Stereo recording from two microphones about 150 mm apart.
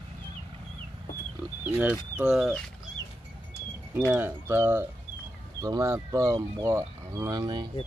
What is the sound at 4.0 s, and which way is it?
Speech, 10° right (ahead or behind).